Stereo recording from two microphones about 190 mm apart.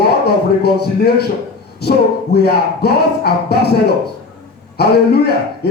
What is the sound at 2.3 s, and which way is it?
Speech, 55° left (ahead or behind).